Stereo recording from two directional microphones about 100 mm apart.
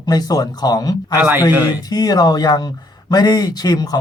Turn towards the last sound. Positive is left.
turn(degrees=40)  # may be behind; listen again after turning